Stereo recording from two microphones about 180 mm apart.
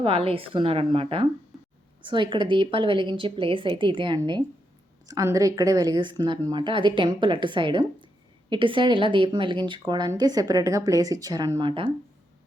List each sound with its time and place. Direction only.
0.0 s a woman's voice: 30° right (ahead or behind)